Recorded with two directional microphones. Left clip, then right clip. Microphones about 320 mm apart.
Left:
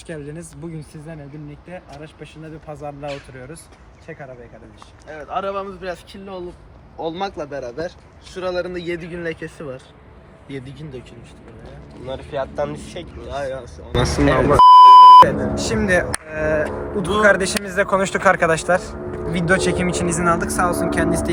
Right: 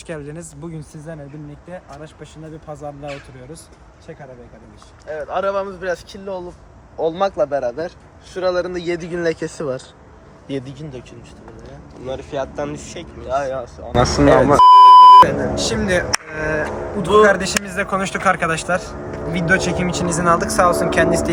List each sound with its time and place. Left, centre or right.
0.1 s speech: centre
2.7 s speech: centre
5.3 s a man's voice: right
7.0 s a man's voice: right
12.0 s speech: centre
13.3 s a man's voice: right
14.6 s beep: centre
15.5 s speech: centre
16.3 s speech: centre
17.2 s speech: centre
20.1 s a man's voice: centre